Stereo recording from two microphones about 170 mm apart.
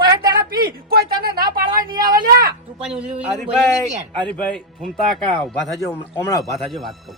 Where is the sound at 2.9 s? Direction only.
5° right (ahead or behind).